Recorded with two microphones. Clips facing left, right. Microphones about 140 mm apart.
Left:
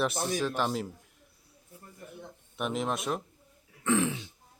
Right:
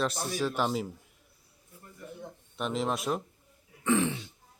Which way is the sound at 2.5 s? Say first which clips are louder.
Even; centre (ahead or behind).